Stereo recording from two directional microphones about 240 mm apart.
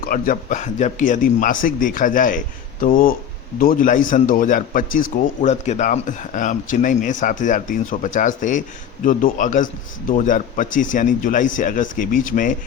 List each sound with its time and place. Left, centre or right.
0.0 s a man's voice: left